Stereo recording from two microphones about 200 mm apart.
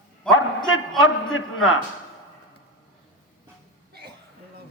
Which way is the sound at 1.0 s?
80° left.